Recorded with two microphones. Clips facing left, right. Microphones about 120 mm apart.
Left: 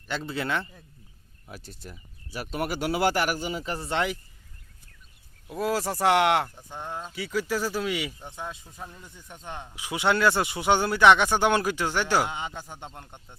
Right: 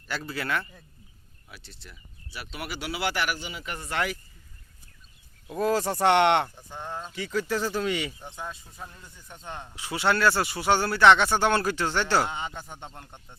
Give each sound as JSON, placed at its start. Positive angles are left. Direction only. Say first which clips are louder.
{"t": 0.1, "sound": "a man's voice", "louder": "left 1 dB", "side_deg": 20}
{"t": 1.5, "sound": "speech", "louder": "left 6 dB", "side_deg": 45}
{"t": 5.5, "sound": "a man's voice", "louder": "right 2 dB", "side_deg": 5}